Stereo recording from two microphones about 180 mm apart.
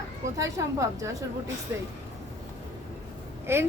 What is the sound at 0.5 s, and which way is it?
Speech, 15° right (ahead or behind).